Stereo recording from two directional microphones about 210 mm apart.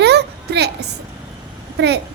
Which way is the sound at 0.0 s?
55° right (ahead or behind).